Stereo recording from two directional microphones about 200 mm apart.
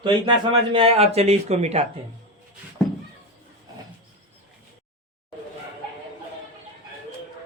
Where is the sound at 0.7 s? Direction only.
30° right (ahead or behind).